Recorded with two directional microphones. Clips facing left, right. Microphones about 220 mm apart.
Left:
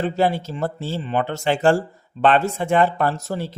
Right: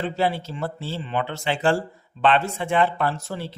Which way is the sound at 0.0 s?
45° left (ahead or behind).